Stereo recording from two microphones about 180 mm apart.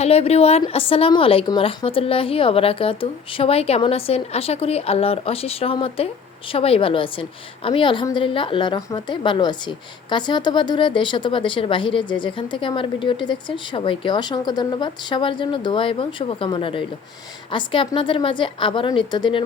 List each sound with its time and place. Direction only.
0.0 s a woman's voice: 35° left (ahead or behind)